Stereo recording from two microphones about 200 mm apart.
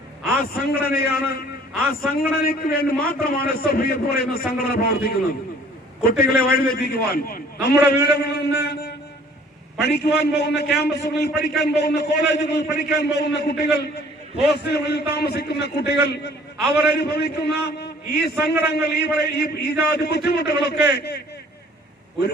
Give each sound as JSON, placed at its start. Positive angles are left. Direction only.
{"t": 0.5, "sound": "a man's voice", "side_deg": 50}